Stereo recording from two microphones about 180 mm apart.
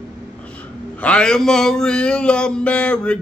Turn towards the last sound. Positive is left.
turn(degrees=5)  # may be behind; listen again after turning